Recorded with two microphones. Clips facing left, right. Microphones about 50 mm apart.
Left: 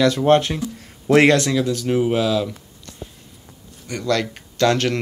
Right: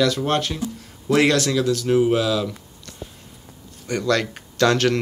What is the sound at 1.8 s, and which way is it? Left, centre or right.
Speech, centre.